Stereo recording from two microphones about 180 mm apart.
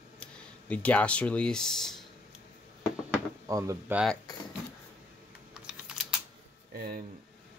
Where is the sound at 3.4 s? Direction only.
15° right (ahead or behind).